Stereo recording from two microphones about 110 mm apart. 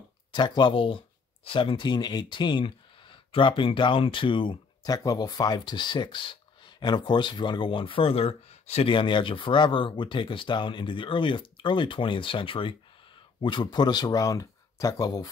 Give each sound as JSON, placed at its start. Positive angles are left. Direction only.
{"t": 0.3, "sound": "speech", "side_deg": 45}
{"t": 4.8, "sound": "speech", "side_deg": 35}
{"t": 8.9, "sound": "speech", "side_deg": 50}